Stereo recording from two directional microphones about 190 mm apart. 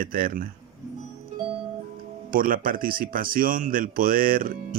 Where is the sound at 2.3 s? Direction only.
45° right (ahead or behind).